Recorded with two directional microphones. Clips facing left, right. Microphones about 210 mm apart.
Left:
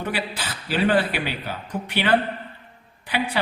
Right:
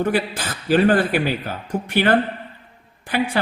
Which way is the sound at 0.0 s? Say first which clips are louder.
Right 7 dB; 45° right (ahead or behind).